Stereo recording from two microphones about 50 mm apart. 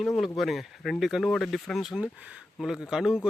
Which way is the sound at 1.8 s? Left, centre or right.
Centre.